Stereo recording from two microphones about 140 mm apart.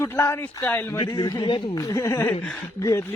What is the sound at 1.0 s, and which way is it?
Speech, 35° left (ahead or behind).